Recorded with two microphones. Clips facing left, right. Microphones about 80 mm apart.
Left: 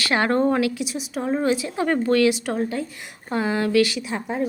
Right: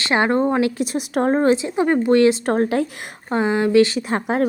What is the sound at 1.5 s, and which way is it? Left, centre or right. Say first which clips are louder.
Speech: right 4 dB; right.